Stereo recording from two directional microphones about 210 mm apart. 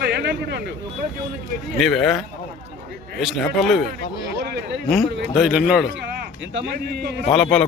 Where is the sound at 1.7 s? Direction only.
Centre (ahead or behind).